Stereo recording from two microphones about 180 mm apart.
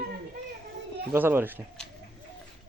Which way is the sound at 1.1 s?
10° right (ahead or behind).